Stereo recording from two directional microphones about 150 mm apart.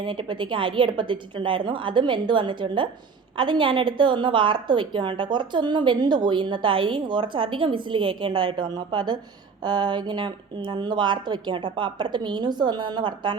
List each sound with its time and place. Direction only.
0.0 s a woman's voice: 35° right (ahead or behind)